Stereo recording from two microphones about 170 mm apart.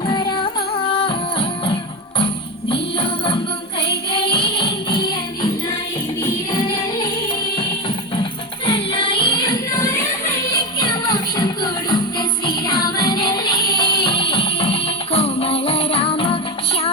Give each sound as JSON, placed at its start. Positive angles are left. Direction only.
{"t": 0.0, "sound": "music", "side_deg": 25}
{"t": 7.5, "sound": "music", "side_deg": 30}